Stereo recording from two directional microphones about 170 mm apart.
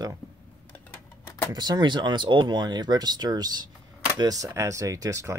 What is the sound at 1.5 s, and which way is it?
Speech, 25° right (ahead or behind).